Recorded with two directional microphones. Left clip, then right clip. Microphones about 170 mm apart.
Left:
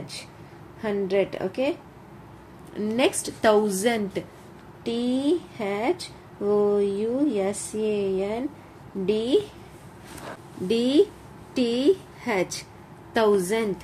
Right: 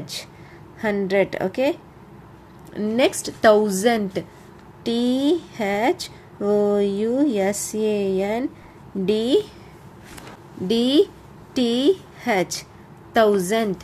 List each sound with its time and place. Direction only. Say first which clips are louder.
0.7 s speech: right 4 dB; 40° right (ahead or behind)
2.7 s a woman's voice: right 4 dB; 25° right (ahead or behind)
4.8 s speech: right 4 dB; 40° right (ahead or behind)
10.7 s a woman's voice: right 3 dB; 30° right (ahead or behind)